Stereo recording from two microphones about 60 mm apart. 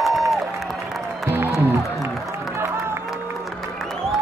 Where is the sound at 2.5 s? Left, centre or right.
Right.